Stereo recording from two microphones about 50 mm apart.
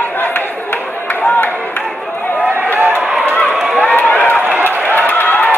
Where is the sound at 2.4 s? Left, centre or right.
Right.